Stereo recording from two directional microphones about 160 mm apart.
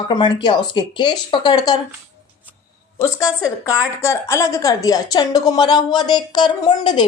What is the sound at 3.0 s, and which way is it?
A woman's voice, 15° left (ahead or behind).